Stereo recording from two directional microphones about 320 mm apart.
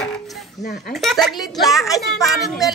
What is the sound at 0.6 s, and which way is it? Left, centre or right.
Speech, left.